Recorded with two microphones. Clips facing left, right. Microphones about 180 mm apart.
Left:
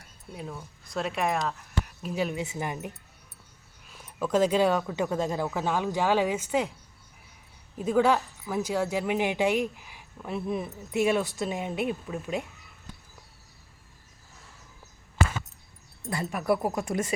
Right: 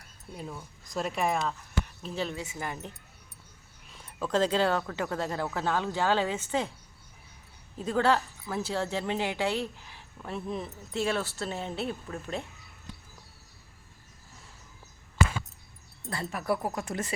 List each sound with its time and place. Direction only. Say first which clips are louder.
0.3 s speech: left 2 dB; centre (ahead or behind); by 2.7 s 20° left (ahead or behind)
3.9 s a woman's voice: left 3 dB; 10° left (ahead or behind)
7.8 s a woman's voice: left 3 dB; 10° left (ahead or behind)
16.0 s a woman's voice: left 4 dB; 15° left (ahead or behind)